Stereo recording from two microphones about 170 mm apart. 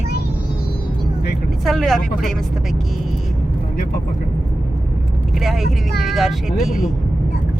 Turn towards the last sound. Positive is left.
turn(degrees=0)  # may be behind; listen again after turning